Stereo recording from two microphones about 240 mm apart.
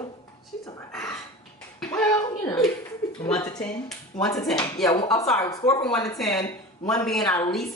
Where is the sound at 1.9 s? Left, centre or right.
Centre.